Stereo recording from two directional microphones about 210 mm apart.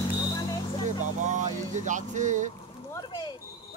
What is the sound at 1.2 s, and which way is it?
Speech, 35° right (ahead or behind).